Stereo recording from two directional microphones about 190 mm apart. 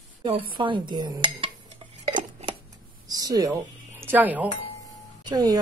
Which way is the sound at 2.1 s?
25° right (ahead or behind).